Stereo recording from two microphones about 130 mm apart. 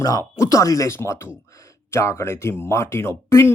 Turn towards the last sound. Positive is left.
turn(degrees=20)  # may be behind; listen again after turning